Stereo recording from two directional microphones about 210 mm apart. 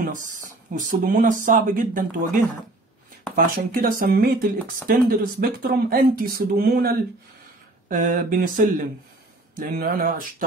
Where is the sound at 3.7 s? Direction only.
40° right (ahead or behind).